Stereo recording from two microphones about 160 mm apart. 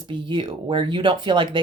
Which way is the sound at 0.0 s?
30° right (ahead or behind).